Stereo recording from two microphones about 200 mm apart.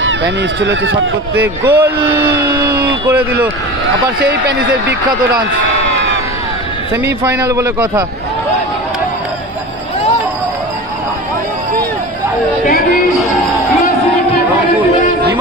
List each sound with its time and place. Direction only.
0.0 s speech: 65° right (ahead or behind)
1.3 s speech: 10° right (ahead or behind)
4.3 s speech: 55° right (ahead or behind)
7.1 s speech: 15° right (ahead or behind)